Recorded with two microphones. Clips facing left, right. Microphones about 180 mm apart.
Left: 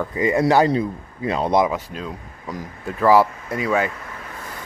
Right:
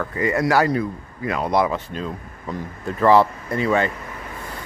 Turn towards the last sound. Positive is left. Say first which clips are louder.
# right 1 dB
turn(degrees=5)  # may be behind; listen again after turning